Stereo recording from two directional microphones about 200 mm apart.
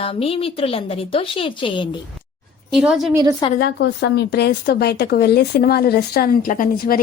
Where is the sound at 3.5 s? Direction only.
55° left (ahead or behind).